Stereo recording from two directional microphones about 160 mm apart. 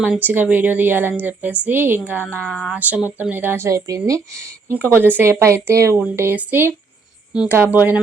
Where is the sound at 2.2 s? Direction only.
10° left (ahead or behind).